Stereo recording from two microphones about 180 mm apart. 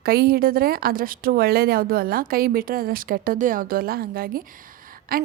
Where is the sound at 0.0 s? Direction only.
60° right (ahead or behind).